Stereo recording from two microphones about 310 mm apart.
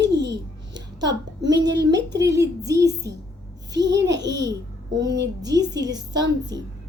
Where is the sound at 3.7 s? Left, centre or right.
Right.